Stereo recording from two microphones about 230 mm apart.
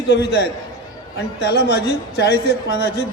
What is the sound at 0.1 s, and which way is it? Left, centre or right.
A man's voice, left.